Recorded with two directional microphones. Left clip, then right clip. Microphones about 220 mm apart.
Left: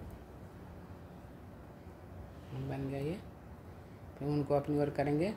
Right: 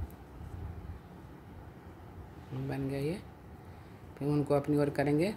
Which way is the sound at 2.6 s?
15° right (ahead or behind).